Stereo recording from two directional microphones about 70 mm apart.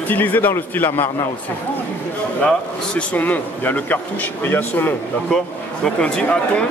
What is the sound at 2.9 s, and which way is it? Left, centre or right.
A man's voice, left.